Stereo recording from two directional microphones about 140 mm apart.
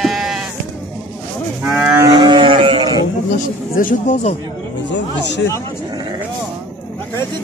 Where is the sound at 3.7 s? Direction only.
75° left (ahead or behind); by 4.4 s 55° left (ahead or behind).